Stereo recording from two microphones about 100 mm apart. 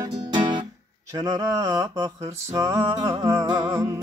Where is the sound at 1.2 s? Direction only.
35° right (ahead or behind).